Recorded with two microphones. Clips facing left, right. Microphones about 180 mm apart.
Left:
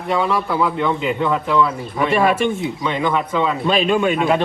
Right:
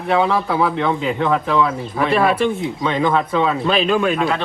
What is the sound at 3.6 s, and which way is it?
Speech, 20° left (ahead or behind).